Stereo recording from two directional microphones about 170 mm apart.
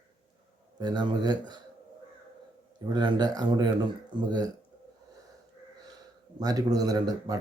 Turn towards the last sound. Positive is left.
turn(degrees=-20)  # may be behind; listen again after turning